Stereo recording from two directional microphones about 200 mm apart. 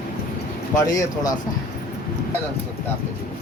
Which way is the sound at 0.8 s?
20° left (ahead or behind).